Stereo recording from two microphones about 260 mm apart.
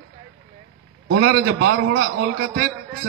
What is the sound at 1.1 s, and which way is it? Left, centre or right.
A man's voice, right.